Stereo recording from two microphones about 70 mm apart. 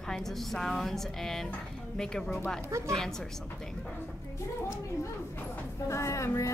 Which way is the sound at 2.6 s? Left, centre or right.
Right.